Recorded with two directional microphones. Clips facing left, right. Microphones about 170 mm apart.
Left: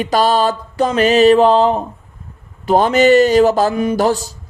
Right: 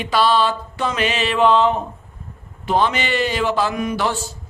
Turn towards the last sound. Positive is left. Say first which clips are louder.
# left 7 dB
turn(degrees=40)  # may be behind; listen again after turning